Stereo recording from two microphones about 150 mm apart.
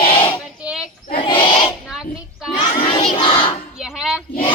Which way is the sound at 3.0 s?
40° left (ahead or behind).